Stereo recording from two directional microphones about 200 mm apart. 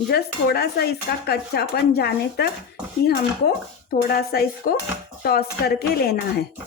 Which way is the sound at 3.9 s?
50° left (ahead or behind).